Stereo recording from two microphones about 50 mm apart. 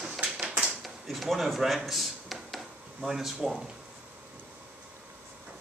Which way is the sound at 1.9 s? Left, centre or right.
Centre.